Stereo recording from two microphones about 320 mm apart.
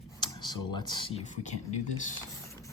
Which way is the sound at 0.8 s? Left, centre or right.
Centre.